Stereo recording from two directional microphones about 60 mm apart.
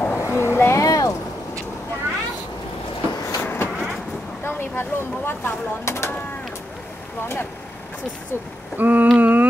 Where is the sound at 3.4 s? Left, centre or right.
Left.